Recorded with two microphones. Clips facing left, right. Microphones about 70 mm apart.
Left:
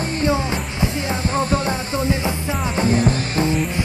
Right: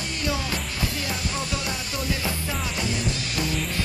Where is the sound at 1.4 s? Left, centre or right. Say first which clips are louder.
Left 9 dB; left.